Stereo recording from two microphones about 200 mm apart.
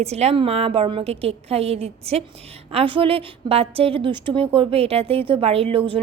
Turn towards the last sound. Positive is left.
turn(degrees=-25)  # may be behind; listen again after turning